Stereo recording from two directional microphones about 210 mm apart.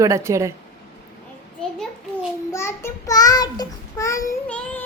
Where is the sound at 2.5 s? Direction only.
15° left (ahead or behind).